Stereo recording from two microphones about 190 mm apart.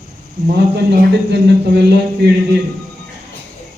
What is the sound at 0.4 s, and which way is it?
Speech, 65° right (ahead or behind).